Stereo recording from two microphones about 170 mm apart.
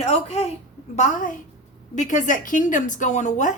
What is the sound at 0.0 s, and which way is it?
A woman's voice, 35° left (ahead or behind).